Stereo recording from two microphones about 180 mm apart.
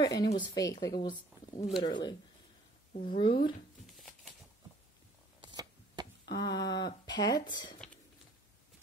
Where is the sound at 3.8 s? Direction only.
Centre (ahead or behind).